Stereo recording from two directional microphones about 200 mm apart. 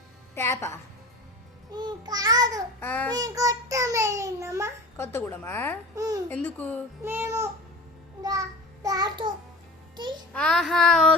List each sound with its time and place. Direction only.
0.3 s a woman's voice: 15° left (ahead or behind)
1.7 s child singing: 20° right (ahead or behind)
2.8 s a woman's voice: 10° left (ahead or behind)
3.2 s a child's voice: 15° right (ahead or behind)
4.9 s a woman's voice: 10° left (ahead or behind)
7.0 s a child's voice: 10° right (ahead or behind)
8.2 s a sound: 15° right (ahead or behind)
10.3 s speech: 5° left (ahead or behind)